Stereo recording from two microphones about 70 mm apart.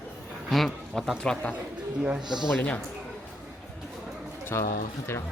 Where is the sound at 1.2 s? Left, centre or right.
Centre.